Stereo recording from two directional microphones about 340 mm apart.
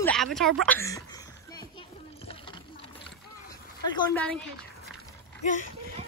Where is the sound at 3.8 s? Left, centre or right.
Centre.